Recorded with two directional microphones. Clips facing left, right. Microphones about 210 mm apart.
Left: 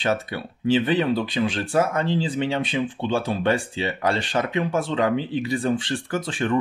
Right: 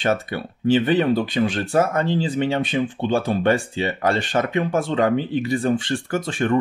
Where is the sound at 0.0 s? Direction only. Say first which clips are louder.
Right 2 dB; 50° right (ahead or behind).